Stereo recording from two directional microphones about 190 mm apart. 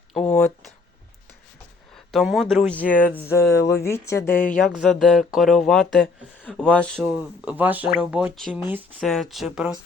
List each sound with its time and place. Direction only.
0.1 s speech: 5° left (ahead or behind)
2.1 s speech: centre (ahead or behind)
4.5 s speech: centre (ahead or behind)
7.0 s speech: 10° right (ahead or behind)